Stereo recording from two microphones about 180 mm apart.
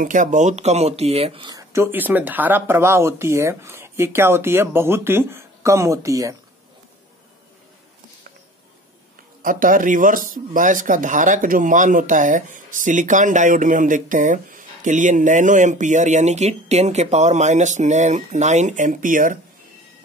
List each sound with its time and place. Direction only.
0.0 s speech: 45° right (ahead or behind); by 6.3 s 15° right (ahead or behind)
9.4 s speech: 50° right (ahead or behind)